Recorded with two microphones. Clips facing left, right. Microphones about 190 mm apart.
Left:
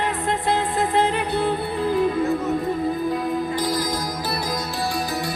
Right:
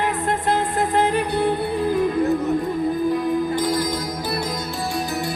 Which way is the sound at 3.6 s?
Centre (ahead or behind).